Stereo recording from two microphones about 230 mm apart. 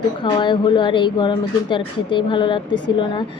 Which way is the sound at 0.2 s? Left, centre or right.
Centre.